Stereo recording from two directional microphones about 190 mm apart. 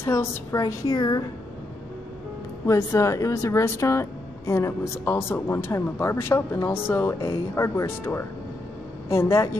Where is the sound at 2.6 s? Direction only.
15° left (ahead or behind).